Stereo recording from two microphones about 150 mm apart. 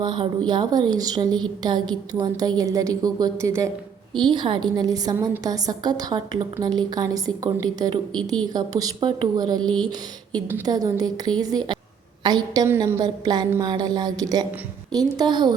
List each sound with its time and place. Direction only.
0.0 s a woman's voice: 30° right (ahead or behind)
4.2 s a woman's voice: 30° right (ahead or behind)
10.7 s a woman's voice: 25° right (ahead or behind)